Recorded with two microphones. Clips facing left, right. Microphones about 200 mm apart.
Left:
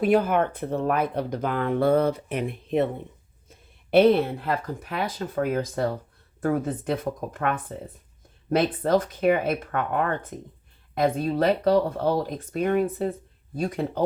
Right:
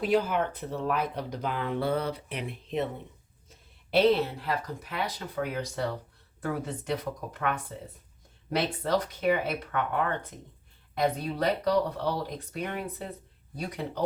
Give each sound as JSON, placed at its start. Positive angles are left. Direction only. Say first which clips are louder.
{"t": 0.0, "sound": "speech", "louder": "left 5 dB", "side_deg": 55}
{"t": 3.9, "sound": "speech", "louder": "left 5 dB", "side_deg": 55}